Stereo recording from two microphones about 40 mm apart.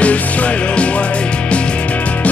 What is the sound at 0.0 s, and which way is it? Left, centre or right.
Music, left.